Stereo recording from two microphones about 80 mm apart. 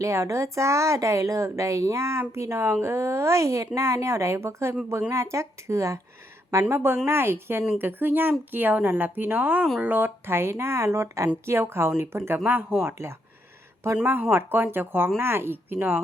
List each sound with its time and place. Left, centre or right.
0.0 s speech: right